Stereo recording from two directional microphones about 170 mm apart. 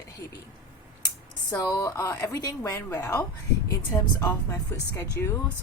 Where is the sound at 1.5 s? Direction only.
20° left (ahead or behind).